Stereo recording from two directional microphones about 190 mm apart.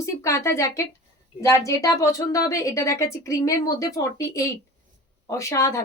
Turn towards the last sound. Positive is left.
turn(degrees=15)  # may be behind; listen again after turning